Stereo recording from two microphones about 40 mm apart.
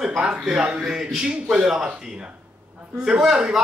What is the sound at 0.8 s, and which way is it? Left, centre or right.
A man's voice, centre.